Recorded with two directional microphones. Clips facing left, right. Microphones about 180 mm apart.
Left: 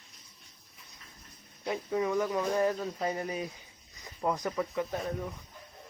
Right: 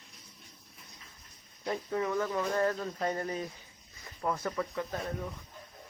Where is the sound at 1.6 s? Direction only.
10° left (ahead or behind).